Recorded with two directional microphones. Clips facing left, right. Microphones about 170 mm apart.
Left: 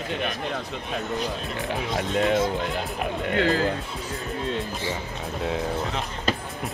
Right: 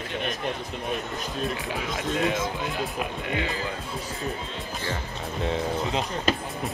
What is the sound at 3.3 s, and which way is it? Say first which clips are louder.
Speech: left 9 dB; 65° left (ahead or behind).